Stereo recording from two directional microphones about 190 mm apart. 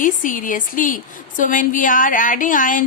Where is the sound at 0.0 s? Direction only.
45° left (ahead or behind).